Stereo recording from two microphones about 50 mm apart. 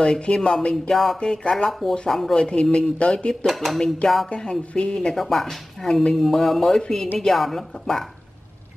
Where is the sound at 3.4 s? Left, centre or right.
Centre.